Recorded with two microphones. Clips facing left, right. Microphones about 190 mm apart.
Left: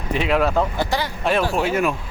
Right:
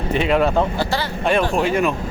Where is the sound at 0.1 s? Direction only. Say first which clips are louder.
Right 2 dB; centre (ahead or behind).